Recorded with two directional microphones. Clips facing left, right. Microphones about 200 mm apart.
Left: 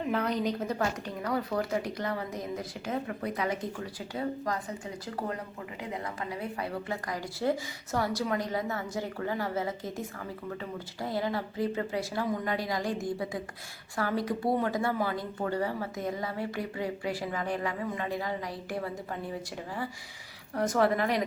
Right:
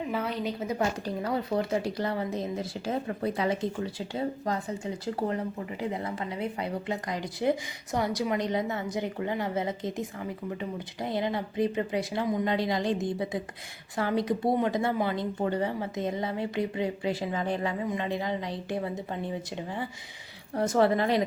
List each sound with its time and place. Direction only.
0.1 s a woman's voice: 5° right (ahead or behind)
1.0 s speech: 25° right (ahead or behind)
5.9 s speech: 25° right (ahead or behind)
20.6 s speech: 25° right (ahead or behind)